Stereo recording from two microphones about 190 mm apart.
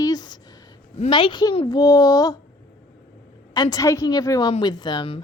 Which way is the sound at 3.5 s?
20° left (ahead or behind).